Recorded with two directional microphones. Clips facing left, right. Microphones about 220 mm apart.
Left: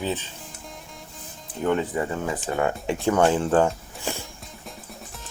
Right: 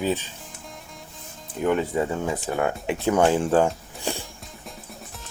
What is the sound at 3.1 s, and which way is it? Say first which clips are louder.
Speech: right 1 dB; 15° right (ahead or behind).